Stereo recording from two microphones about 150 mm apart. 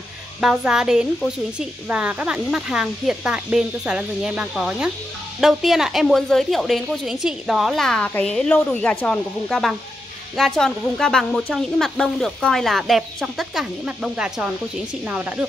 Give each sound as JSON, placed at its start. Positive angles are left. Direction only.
{"t": 0.4, "sound": "speech", "side_deg": -5}